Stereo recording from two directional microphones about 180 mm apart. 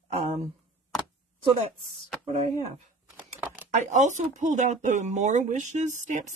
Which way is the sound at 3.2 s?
10° right (ahead or behind).